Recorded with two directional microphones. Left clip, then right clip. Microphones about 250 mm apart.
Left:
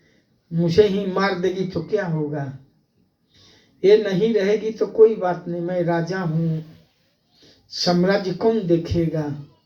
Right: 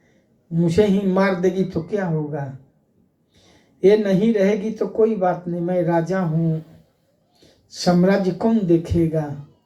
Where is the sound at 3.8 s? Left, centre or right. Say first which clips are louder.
Even; right.